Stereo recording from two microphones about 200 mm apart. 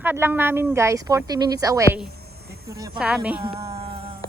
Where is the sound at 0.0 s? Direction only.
10° right (ahead or behind).